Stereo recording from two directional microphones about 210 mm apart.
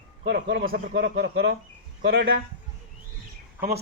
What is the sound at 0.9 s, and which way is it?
A man's voice, 55° right (ahead or behind).